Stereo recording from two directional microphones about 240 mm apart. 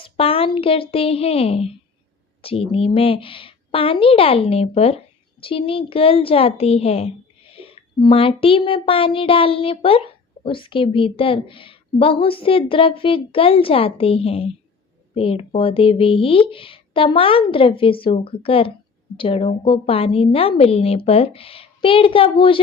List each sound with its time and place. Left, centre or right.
0.0 s a woman's voice: left